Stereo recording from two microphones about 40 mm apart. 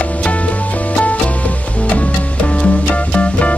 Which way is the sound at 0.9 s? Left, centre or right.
Left.